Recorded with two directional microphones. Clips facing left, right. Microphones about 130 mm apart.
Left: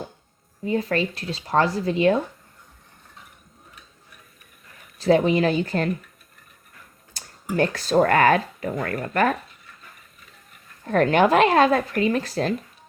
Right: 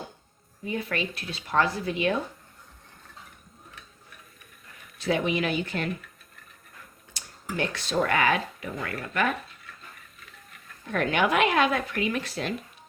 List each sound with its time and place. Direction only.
0.6 s speech: 35° left (ahead or behind)
4.9 s speech: 35° left (ahead or behind)
7.5 s speech: 45° left (ahead or behind)
10.8 s speech: 40° left (ahead or behind)